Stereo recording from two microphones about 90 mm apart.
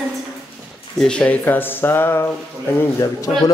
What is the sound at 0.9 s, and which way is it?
A man's voice, 10° left (ahead or behind).